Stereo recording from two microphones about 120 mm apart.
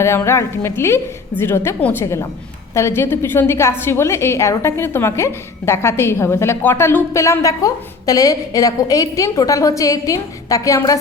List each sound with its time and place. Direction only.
0.0 s a woman's voice: 20° left (ahead or behind)